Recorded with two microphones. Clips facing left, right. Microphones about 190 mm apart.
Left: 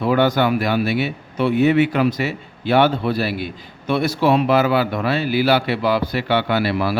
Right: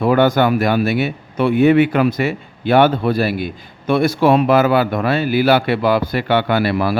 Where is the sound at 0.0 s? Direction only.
50° right (ahead or behind).